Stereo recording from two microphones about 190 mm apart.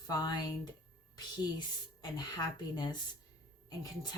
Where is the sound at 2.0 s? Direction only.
20° left (ahead or behind).